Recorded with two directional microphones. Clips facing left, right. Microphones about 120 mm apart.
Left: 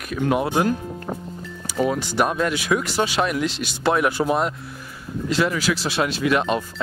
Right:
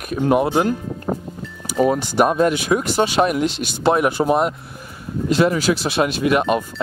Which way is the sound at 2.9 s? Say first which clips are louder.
Right 5 dB; 25° right (ahead or behind).